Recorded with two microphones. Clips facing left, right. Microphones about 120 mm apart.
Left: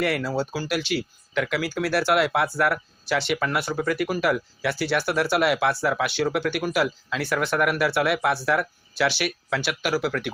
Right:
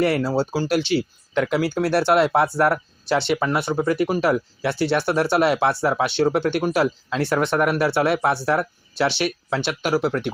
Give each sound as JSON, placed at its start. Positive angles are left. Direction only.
{"t": 0.0, "sound": "speech", "side_deg": -30}